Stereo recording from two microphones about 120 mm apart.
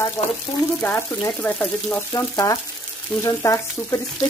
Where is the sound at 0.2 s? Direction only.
35° left (ahead or behind).